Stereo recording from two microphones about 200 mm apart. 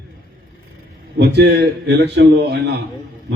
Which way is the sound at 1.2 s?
55° right (ahead or behind).